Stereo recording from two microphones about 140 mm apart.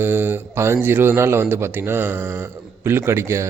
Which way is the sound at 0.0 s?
15° right (ahead or behind).